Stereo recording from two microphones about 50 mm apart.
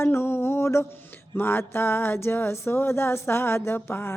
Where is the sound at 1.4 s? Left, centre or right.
Left.